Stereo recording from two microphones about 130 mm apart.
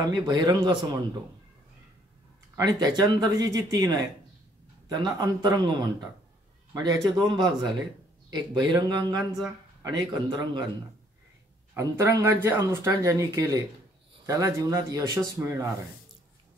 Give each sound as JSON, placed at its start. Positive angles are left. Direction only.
{"t": 0.1, "sound": "speech", "side_deg": -35}
{"t": 2.5, "sound": "speech", "side_deg": -30}
{"t": 7.2, "sound": "speech", "side_deg": -35}
{"t": 11.7, "sound": "speech", "side_deg": -25}